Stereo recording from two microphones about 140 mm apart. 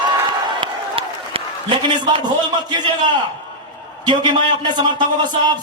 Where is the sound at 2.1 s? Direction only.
30° right (ahead or behind).